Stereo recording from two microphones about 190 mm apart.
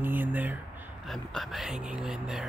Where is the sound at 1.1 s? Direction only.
Centre (ahead or behind).